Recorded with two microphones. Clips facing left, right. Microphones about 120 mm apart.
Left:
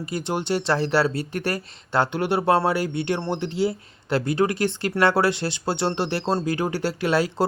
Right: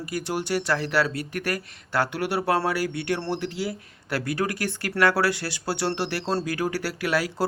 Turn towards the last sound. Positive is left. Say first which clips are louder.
# left 3 dB
turn(degrees=25)  # may be behind; listen again after turning